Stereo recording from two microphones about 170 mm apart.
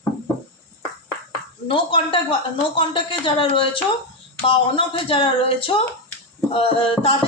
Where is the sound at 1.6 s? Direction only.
30° left (ahead or behind).